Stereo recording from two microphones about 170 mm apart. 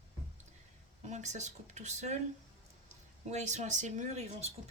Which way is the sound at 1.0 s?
45° right (ahead or behind).